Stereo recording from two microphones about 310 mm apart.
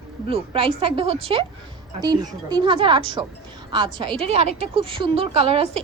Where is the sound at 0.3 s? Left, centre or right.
Centre.